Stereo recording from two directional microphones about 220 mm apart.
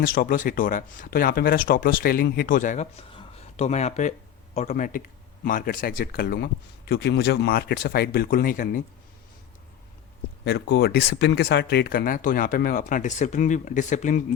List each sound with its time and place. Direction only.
0.0 s speech: 40° left (ahead or behind)
10.4 s speech: 50° left (ahead or behind)